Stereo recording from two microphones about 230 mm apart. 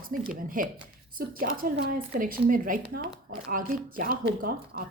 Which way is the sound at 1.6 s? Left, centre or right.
Right.